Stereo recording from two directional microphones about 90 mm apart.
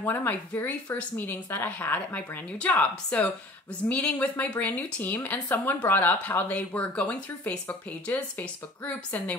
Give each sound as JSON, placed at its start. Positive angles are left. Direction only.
{"t": 0.0, "sound": "a woman's voice", "side_deg": 20}